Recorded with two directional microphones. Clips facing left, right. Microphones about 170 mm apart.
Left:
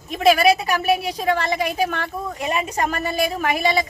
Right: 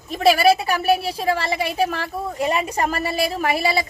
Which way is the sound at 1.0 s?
30° right (ahead or behind).